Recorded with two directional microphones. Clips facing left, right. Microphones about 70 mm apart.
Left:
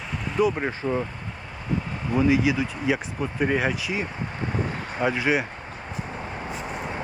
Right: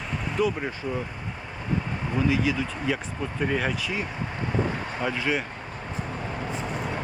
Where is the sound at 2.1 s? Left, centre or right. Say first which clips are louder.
Left 4 dB; centre.